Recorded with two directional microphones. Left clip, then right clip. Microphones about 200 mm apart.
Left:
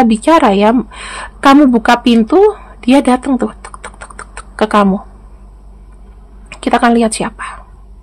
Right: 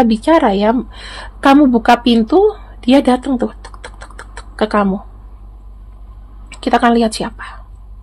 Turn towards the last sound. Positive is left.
turn(degrees=20)  # may be behind; listen again after turning